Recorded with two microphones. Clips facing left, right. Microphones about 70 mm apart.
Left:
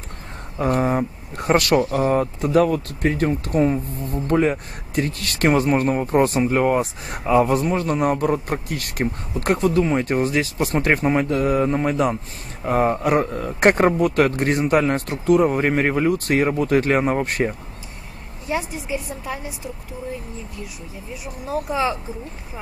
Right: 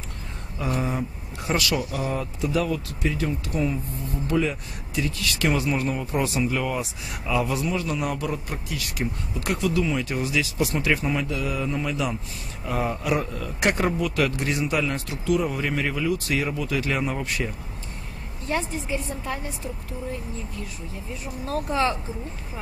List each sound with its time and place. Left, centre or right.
0.6 s speech: left
18.5 s a woman's voice: centre
21.5 s a woman's voice: centre